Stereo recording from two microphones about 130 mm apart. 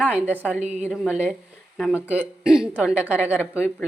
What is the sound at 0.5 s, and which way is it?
Speech, 60° right (ahead or behind).